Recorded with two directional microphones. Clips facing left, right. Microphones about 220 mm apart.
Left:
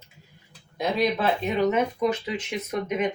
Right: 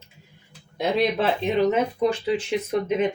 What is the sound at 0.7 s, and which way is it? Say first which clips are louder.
Speech: right 2 dB; 25° right (ahead or behind).